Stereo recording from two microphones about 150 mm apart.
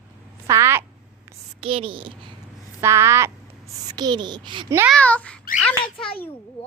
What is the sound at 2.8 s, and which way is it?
Speech, 15° right (ahead or behind).